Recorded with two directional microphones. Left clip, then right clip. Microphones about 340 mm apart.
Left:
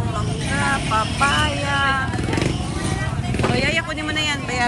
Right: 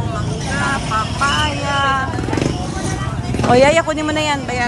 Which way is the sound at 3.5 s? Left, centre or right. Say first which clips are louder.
Right 12 dB; centre.